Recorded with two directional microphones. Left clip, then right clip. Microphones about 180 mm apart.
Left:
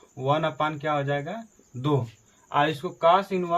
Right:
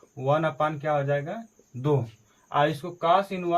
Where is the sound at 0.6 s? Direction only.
15° left (ahead or behind).